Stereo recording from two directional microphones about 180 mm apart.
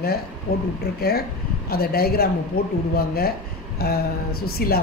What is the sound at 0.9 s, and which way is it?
A woman's voice, 65° left (ahead or behind).